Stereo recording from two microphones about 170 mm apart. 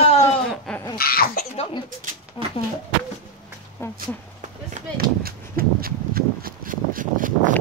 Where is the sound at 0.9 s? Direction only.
60° left (ahead or behind).